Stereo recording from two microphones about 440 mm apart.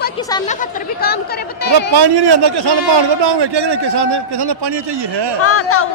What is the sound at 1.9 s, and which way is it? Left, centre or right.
A man's voice, right.